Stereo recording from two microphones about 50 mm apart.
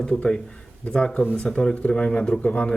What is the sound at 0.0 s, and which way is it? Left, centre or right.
Speech, centre.